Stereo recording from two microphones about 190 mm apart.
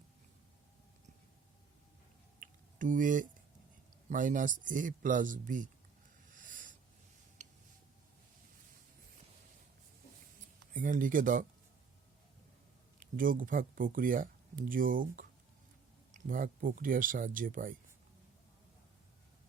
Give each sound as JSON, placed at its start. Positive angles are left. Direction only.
{"t": 2.4, "sound": "typing", "side_deg": -45}
{"t": 4.1, "sound": "speech", "side_deg": -45}
{"t": 6.3, "sound": "a sound", "side_deg": -45}
{"t": 10.8, "sound": "speech", "side_deg": -45}
{"t": 13.0, "sound": "speech", "side_deg": -45}